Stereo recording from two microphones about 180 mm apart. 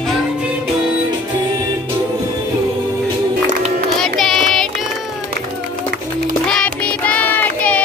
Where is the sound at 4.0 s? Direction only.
5° left (ahead or behind).